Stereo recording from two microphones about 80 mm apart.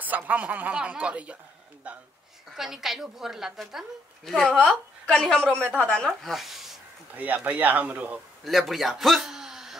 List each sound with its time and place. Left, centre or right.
0.0 s speech: right
2.5 s a woman's voice: centre
4.3 s a woman's voice: centre
7.2 s speech: centre
8.5 s a man's voice: centre